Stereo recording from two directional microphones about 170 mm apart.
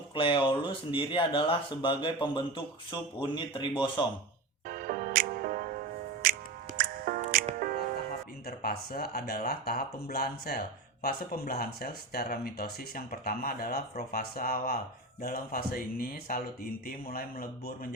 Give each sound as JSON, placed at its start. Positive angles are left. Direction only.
{"t": 0.1, "sound": "speech", "side_deg": 30}
{"t": 4.7, "sound": "music", "side_deg": -60}
{"t": 8.4, "sound": "speech", "side_deg": 65}